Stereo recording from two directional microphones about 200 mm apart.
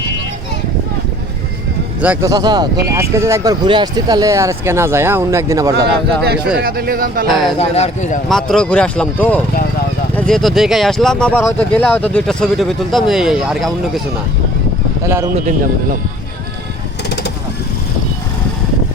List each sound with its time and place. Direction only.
2.0 s speech: 5° right (ahead or behind)
2.3 s speech: 20° right (ahead or behind)
6.2 s speech: 55° right (ahead or behind)
7.3 s speech: centre (ahead or behind)
7.6 s speech: 35° left (ahead or behind)
8.3 s speech: centre (ahead or behind)
15.0 s speech: 15° right (ahead or behind)